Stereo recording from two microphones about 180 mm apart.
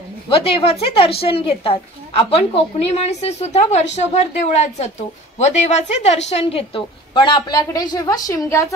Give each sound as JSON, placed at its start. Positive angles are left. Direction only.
{"t": 0.3, "sound": "a woman's voice", "side_deg": 30}